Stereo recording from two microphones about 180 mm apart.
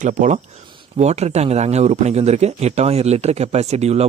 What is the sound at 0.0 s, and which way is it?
Speech, 40° right (ahead or behind).